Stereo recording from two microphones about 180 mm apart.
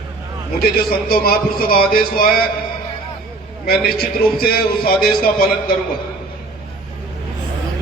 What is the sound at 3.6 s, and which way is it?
A man's voice, 55° left (ahead or behind).